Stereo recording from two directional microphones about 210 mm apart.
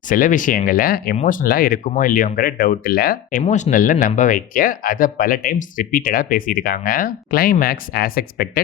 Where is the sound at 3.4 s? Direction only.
35° left (ahead or behind).